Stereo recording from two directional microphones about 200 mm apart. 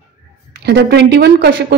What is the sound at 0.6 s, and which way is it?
A woman's voice, 55° right (ahead or behind).